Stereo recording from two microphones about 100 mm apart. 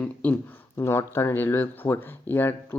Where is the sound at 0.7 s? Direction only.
25° left (ahead or behind).